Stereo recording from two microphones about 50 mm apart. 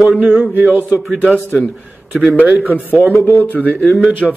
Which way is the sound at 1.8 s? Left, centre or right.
Centre.